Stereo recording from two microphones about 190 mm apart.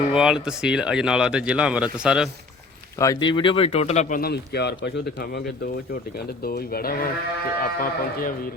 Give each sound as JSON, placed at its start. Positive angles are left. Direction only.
{"t": 0.1, "sound": "speech", "side_deg": -5}
{"t": 3.0, "sound": "speech", "side_deg": 20}
{"t": 4.2, "sound": "speech", "side_deg": 60}